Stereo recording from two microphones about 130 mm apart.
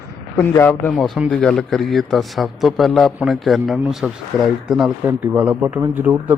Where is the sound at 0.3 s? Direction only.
20° left (ahead or behind).